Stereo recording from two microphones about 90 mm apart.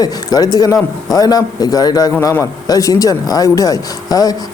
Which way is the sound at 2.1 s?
30° left (ahead or behind).